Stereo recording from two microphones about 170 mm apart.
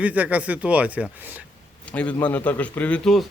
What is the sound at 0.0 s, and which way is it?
Speech, 10° right (ahead or behind).